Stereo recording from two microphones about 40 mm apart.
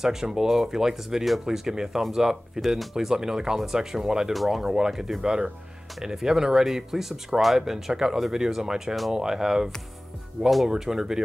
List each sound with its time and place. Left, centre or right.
0.0 s speech: centre
2.6 s speech: centre
4.3 s speech: centre
5.2 s speech: centre